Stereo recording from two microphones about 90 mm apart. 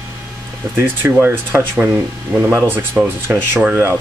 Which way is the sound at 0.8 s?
25° right (ahead or behind).